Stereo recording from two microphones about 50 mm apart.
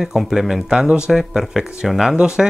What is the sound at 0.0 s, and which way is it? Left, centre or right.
Speech, centre.